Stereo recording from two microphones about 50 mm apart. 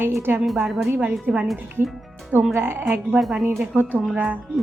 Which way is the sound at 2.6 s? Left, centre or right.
Right.